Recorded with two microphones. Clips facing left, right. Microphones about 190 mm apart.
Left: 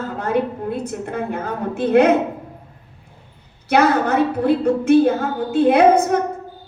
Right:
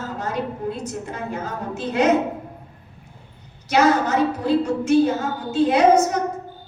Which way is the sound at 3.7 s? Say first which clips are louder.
Left 2 dB; 60° left (ahead or behind).